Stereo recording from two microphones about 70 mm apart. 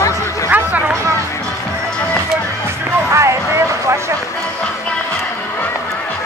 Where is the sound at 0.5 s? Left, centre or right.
Right.